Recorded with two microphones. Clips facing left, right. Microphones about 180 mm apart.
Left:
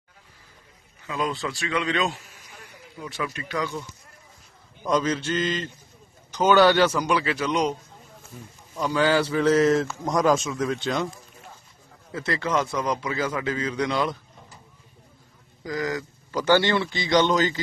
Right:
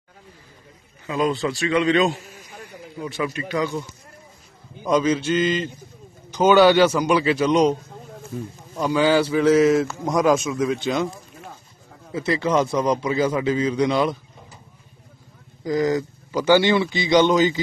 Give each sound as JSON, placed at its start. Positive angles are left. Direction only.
{"t": 1.0, "sound": "a man's voice", "side_deg": -15}
{"t": 1.3, "sound": "a man's voice", "side_deg": -30}
{"t": 1.6, "sound": "a man's voice", "side_deg": -5}
{"t": 4.8, "sound": "a man's voice", "side_deg": -5}
{"t": 8.7, "sound": "a man's voice", "side_deg": -10}
{"t": 12.3, "sound": "a man's voice", "side_deg": -20}
{"t": 15.6, "sound": "a man's voice", "side_deg": -25}
{"t": 16.3, "sound": "a man's voice", "side_deg": -5}